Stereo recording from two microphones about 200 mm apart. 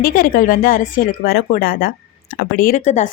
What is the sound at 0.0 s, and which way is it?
Speech, 45° left (ahead or behind).